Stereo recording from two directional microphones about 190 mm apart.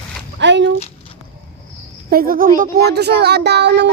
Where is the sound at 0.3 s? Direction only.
70° right (ahead or behind).